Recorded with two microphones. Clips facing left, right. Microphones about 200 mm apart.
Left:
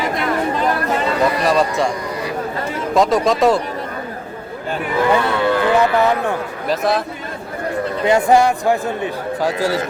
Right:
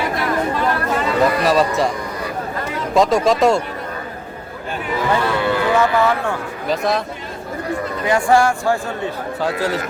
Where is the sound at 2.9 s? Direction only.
Centre (ahead or behind).